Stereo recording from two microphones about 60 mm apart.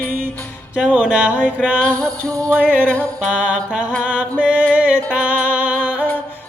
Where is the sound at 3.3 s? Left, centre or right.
Right.